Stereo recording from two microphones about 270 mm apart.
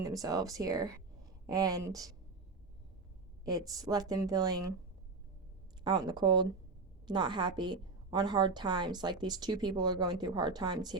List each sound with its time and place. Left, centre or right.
0.0 s speech: centre
3.4 s a woman's voice: centre
5.8 s a woman's voice: centre